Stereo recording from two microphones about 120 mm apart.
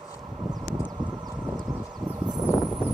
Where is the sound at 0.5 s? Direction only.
35° right (ahead or behind).